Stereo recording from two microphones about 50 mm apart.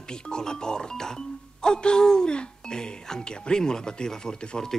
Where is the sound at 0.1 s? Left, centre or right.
Centre.